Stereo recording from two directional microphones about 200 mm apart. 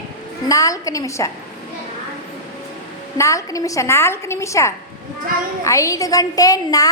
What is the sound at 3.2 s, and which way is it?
A woman's voice, 15° left (ahead or behind).